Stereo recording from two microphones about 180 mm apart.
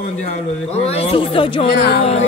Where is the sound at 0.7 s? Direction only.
35° left (ahead or behind).